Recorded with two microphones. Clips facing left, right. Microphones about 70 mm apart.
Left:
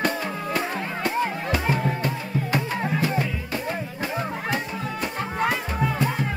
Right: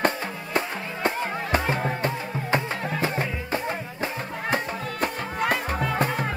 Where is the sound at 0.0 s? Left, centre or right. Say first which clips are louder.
Even; right.